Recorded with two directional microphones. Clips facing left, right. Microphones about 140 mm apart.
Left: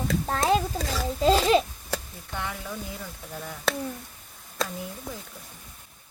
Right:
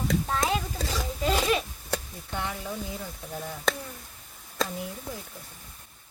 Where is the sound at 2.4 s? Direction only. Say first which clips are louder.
Right 1 dB; 20° right (ahead or behind).